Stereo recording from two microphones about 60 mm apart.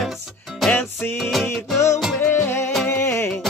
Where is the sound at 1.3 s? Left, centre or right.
Centre.